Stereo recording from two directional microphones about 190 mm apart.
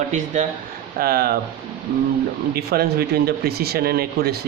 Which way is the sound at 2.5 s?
55° right (ahead or behind).